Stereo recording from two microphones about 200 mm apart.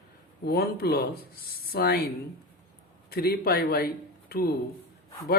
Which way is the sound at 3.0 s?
50° left (ahead or behind).